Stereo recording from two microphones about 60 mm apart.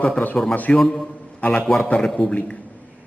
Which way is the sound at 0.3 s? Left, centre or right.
Centre.